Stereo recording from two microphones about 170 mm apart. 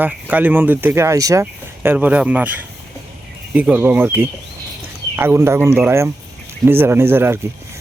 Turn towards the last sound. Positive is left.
turn(degrees=-15)  # may be behind; listen again after turning